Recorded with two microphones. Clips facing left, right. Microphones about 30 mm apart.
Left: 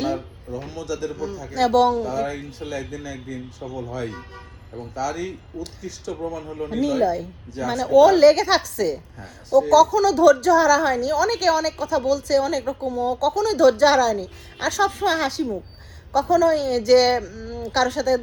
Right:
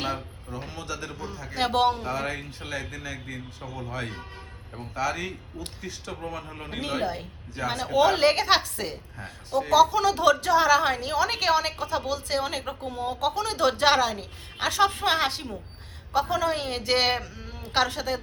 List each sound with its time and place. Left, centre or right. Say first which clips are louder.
0.4 s speech: left 4 dB; right
1.2 s speech: left 7 dB; right
1.5 s a woman's voice: left 6 dB; right
2.1 s a woman's voice: left 5 dB; right